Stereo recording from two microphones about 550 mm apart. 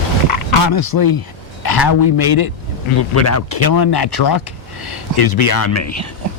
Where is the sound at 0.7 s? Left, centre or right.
Left.